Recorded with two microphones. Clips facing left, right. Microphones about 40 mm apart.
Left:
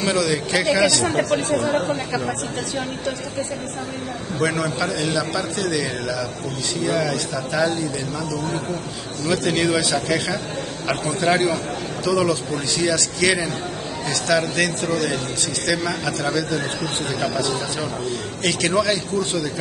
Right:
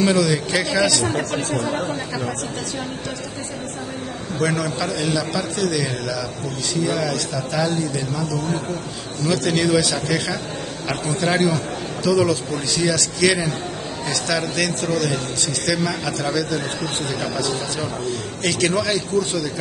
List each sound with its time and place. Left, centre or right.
0.0 s a man's voice: centre
4.4 s a man's voice: centre